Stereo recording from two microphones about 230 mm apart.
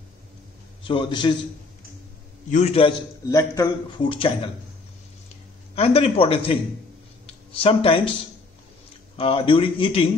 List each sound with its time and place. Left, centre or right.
0.8 s a man's voice: left
2.5 s a man's voice: left
3.3 s a man's voice: centre
5.8 s a man's voice: left
9.1 s a man's voice: left